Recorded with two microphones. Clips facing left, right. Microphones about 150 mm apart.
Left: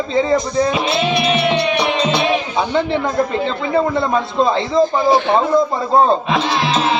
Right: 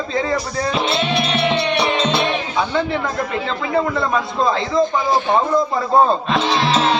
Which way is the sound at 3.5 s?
25° left (ahead or behind).